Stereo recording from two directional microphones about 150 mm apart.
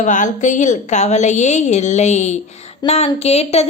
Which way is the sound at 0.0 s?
55° left (ahead or behind).